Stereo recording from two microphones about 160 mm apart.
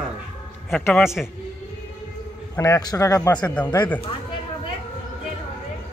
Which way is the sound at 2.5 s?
20° left (ahead or behind).